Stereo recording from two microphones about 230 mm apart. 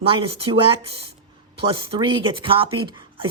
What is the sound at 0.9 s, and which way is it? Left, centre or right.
Speech, left.